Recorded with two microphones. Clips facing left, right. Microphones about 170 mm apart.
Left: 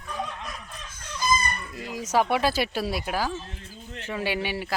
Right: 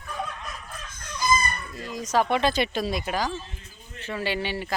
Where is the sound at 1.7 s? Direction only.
10° left (ahead or behind).